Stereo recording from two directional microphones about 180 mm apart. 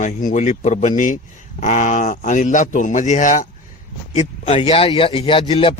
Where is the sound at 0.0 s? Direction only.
45° left (ahead or behind).